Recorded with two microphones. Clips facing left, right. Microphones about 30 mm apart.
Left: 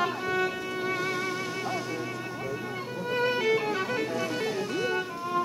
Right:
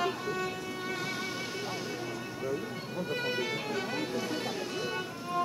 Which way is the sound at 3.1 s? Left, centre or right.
Centre.